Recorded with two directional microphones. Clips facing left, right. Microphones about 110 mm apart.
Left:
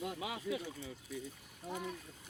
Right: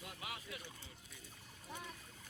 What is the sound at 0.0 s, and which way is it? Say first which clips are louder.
Speech: left 9 dB; 85° left.